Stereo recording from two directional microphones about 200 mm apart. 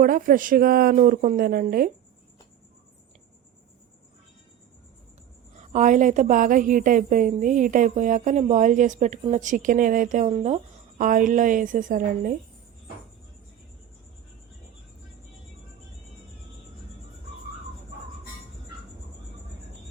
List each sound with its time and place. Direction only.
0.0 s speech: 45° right (ahead or behind)
5.5 s a woman's voice: 35° right (ahead or behind)